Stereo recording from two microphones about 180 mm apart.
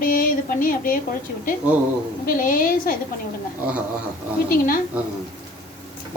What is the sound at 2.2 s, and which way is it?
Speech, 50° left (ahead or behind).